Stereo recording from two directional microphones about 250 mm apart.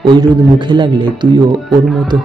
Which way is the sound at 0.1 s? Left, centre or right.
Centre.